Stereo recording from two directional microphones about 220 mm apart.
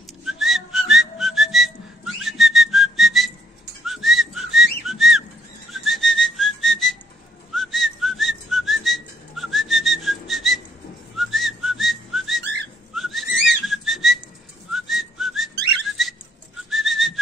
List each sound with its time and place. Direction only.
0.2 s whistling: centre (ahead or behind)